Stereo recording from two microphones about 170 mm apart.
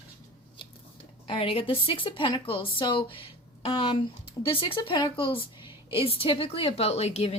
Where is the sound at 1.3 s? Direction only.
35° left (ahead or behind).